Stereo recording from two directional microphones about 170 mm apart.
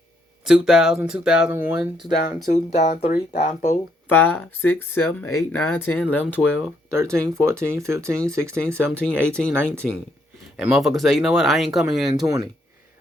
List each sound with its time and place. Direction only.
0.4 s speech: 5° right (ahead or behind)
2.5 s speech: 45° left (ahead or behind)
4.1 s speech: 10° left (ahead or behind)
6.9 s speech: 15° right (ahead or behind)
9.3 s speech: 5° left (ahead or behind)
9.6 s speech: 15° right (ahead or behind)
12.2 s speech: 20° right (ahead or behind)